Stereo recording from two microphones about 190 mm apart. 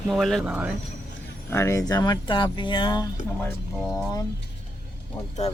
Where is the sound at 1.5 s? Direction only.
15° left (ahead or behind).